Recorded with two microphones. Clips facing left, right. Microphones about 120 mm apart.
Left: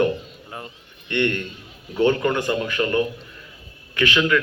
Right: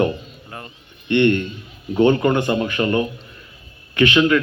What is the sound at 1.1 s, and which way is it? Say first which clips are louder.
A man's voice: right 7 dB; 25° right (ahead or behind).